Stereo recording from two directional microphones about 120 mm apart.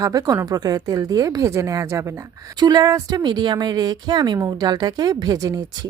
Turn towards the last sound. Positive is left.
turn(degrees=-30)  # may be behind; listen again after turning